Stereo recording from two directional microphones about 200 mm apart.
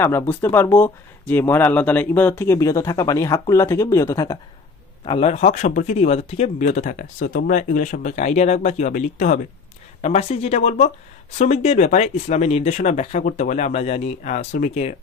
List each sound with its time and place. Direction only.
0.0 s speech: 10° left (ahead or behind)
5.0 s speech: 30° left (ahead or behind)